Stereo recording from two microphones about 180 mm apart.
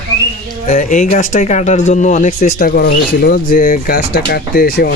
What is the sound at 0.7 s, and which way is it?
Speech, 40° left (ahead or behind).